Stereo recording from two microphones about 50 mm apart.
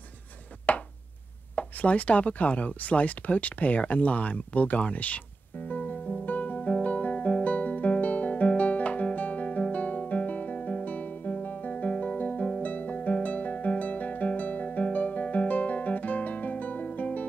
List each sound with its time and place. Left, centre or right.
0.7 s a sound: left
1.5 s speech: left
5.7 s music: left
6.2 s guitar: left
12.6 s music: left